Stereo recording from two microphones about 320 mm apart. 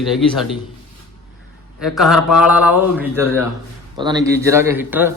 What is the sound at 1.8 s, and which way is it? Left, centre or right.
A man's voice, centre.